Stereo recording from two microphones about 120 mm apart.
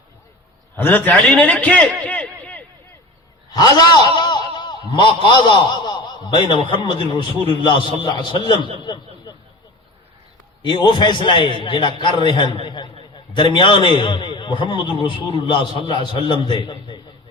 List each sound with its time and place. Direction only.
0.8 s a man's voice: 15° left (ahead or behind)
3.5 s a man's voice: 35° left (ahead or behind)
8.8 s a sound: 40° left (ahead or behind)
10.6 s a man's voice: 40° left (ahead or behind)